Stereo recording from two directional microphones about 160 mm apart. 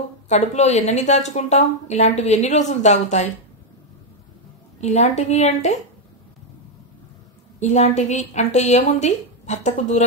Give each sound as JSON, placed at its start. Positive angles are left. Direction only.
{"t": 0.3, "sound": "a woman's voice", "side_deg": 45}
{"t": 4.7, "sound": "a woman's voice", "side_deg": 45}
{"t": 7.6, "sound": "a woman's voice", "side_deg": 45}